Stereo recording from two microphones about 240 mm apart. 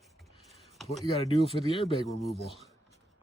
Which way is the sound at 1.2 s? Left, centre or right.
Left.